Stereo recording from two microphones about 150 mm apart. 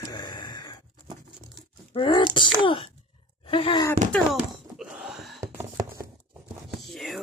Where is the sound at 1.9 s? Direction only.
30° left (ahead or behind).